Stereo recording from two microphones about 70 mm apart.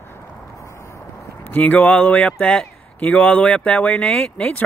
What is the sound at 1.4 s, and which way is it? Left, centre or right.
Speech, left.